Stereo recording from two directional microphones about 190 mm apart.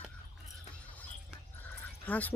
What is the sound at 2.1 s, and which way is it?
Speech, 10° left (ahead or behind).